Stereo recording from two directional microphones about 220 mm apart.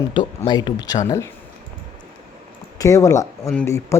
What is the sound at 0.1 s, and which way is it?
Speech, 20° left (ahead or behind).